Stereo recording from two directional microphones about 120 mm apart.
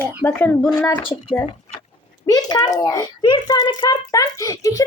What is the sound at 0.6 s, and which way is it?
Speech, 5° left (ahead or behind).